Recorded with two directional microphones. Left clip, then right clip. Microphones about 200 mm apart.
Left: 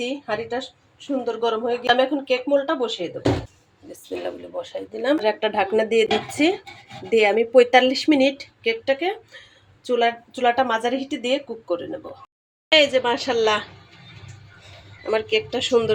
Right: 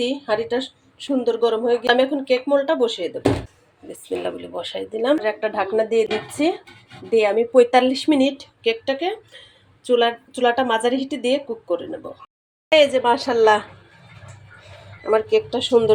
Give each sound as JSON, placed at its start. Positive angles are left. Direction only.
{"t": 0.0, "sound": "speech", "side_deg": -20}
{"t": 4.2, "sound": "speech", "side_deg": -10}
{"t": 5.2, "sound": "a woman's voice", "side_deg": 5}
{"t": 10.9, "sound": "speech", "side_deg": 15}
{"t": 11.2, "sound": "speech", "side_deg": -10}
{"t": 15.1, "sound": "speech", "side_deg": -10}